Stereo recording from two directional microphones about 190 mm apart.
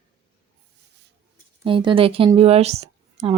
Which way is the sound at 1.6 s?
25° right (ahead or behind).